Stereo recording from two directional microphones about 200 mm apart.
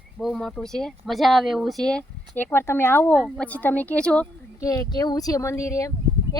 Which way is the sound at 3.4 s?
10° left (ahead or behind).